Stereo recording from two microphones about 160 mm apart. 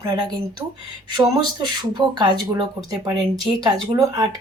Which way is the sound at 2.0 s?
30° right (ahead or behind).